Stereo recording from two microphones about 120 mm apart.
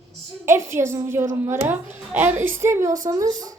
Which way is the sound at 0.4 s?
20° right (ahead or behind).